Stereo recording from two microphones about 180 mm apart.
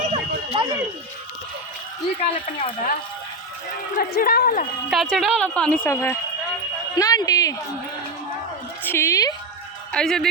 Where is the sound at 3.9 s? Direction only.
55° left (ahead or behind).